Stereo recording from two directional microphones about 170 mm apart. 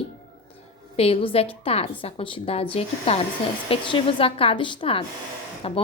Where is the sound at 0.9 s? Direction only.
35° left (ahead or behind).